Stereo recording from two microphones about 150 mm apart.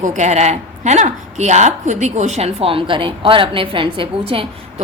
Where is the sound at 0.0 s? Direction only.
55° right (ahead or behind).